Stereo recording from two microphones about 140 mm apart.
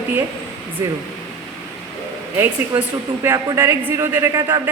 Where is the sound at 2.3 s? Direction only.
15° right (ahead or behind).